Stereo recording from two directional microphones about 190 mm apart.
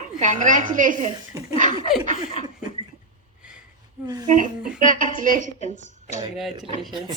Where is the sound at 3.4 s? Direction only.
5° right (ahead or behind).